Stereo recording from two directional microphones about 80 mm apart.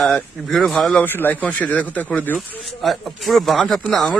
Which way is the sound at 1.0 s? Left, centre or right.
Left.